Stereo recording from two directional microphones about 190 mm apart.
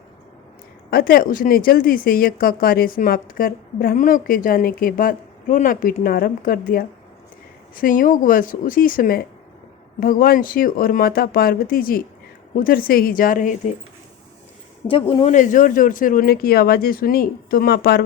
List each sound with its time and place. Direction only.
0.9 s speech: 50° left (ahead or behind)
14.8 s speech: 30° left (ahead or behind); by 18.0 s 55° left (ahead or behind)